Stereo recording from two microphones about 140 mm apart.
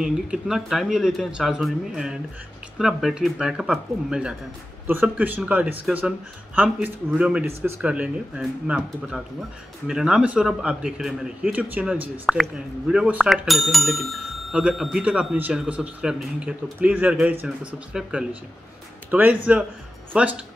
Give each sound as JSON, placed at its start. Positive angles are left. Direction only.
{"t": 0.0, "sound": "speech", "side_deg": -5}